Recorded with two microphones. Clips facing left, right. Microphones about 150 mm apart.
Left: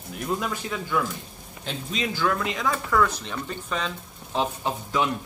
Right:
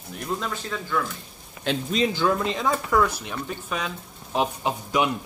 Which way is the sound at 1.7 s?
80° right.